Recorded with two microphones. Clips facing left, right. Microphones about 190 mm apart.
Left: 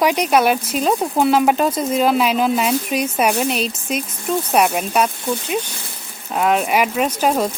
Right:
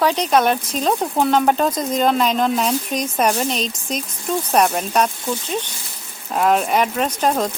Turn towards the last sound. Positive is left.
turn(degrees=10)  # may be behind; listen again after turning